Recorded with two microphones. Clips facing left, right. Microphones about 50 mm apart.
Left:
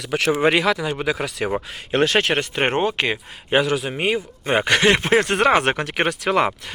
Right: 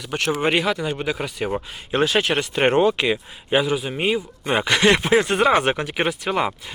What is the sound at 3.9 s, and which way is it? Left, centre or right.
Speech, left.